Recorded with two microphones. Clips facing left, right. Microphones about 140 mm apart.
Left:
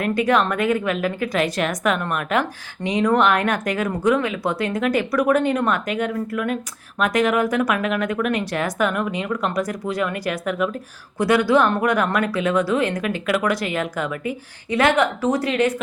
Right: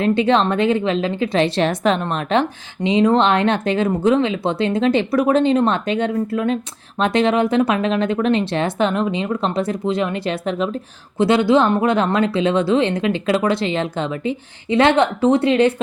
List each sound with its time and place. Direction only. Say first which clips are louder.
0.0 s a woman's voice: right 3 dB; 25° right (ahead or behind)